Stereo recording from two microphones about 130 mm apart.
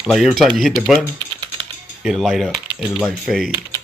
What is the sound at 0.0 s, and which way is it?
Speech, centre (ahead or behind).